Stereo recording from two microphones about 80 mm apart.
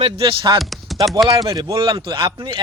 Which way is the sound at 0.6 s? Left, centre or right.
Centre.